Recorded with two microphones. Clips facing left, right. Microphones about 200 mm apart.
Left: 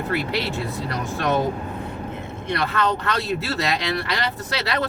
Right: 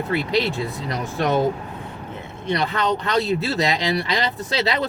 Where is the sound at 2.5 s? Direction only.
15° right (ahead or behind).